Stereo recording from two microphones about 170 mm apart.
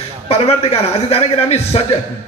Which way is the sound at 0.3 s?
35° left (ahead or behind).